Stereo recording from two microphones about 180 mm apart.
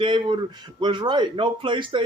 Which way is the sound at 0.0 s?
25° right (ahead or behind).